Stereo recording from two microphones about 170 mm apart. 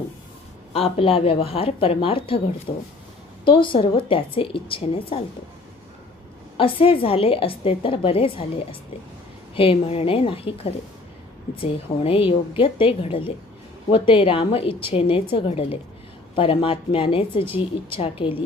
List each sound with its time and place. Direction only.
0.7 s a woman's voice: 35° left (ahead or behind)
3.4 s a woman's voice: 30° left (ahead or behind)
6.6 s a woman's voice: 30° left (ahead or behind)
9.6 s a woman's voice: 35° left (ahead or behind)